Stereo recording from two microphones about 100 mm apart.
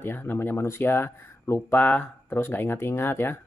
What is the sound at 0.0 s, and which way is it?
Speech, 20° left (ahead or behind).